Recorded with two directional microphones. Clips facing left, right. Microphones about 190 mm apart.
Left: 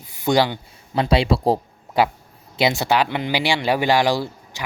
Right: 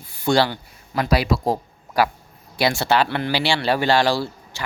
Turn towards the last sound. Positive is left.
turn(degrees=15)  # may be behind; listen again after turning